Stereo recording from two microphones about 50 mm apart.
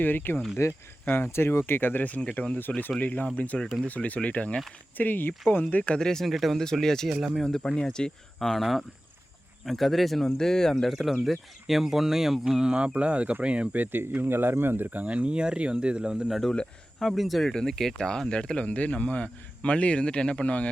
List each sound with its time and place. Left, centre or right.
0.0 s speech: left
1.2 s speech: left
4.9 s speech: left
5.8 s speech: centre
6.2 s speech: centre; by 13.7 s right
13.7 s speech: right
14.2 s speech: right; by 16.3 s centre
17.0 s speech: centre
17.5 s speech: centre